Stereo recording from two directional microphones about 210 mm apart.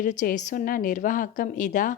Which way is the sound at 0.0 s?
35° left (ahead or behind).